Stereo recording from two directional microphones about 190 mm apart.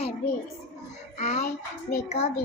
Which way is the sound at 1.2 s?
35° left (ahead or behind).